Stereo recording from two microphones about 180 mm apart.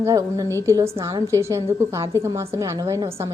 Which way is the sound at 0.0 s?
20° right (ahead or behind).